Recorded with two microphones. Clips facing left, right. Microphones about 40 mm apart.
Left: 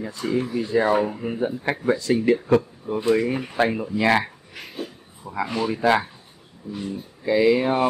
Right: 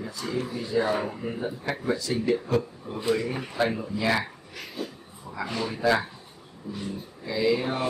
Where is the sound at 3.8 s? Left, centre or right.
Left.